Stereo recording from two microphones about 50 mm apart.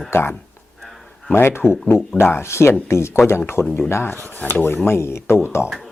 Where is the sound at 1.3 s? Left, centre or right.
Left.